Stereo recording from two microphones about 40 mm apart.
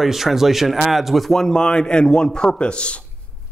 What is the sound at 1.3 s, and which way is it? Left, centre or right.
Speech, centre.